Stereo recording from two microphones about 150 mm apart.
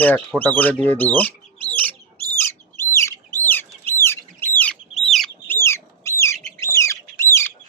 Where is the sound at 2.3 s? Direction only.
20° left (ahead or behind).